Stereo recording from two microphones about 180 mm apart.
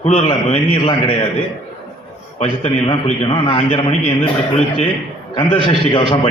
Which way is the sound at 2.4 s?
30° left (ahead or behind).